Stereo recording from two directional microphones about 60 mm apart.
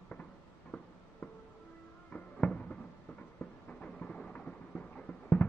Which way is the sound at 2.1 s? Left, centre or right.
Left.